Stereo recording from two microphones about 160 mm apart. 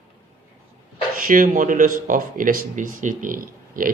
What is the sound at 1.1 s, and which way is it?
Speech, 60° right (ahead or behind).